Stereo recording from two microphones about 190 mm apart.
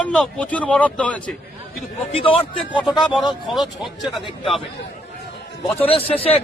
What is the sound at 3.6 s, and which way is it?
Speech, centre (ahead or behind).